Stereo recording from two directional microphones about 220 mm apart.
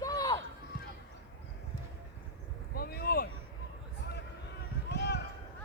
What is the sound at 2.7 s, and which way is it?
Vehicle, 45° left (ahead or behind).